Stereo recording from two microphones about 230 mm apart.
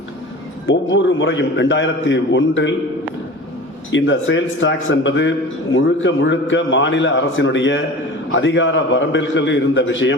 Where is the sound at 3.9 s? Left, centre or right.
Left.